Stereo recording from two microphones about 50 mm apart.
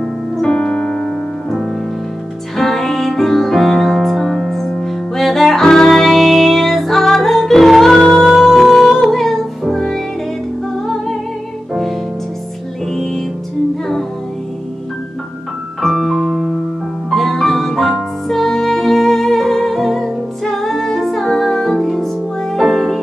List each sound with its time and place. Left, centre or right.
0.4 s piano: centre
2.5 s music: centre
12.9 s music: centre
15.8 s piano: centre
17.1 s music: centre